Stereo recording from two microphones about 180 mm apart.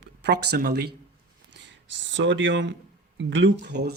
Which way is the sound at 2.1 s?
90° right.